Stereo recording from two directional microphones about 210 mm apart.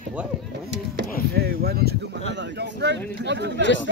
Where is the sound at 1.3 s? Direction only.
50° right (ahead or behind).